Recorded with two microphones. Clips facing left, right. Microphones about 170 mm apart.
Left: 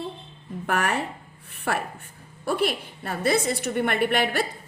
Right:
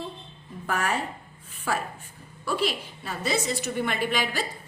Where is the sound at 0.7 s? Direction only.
70° left (ahead or behind).